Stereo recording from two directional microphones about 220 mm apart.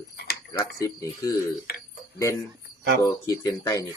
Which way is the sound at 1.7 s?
45° left (ahead or behind).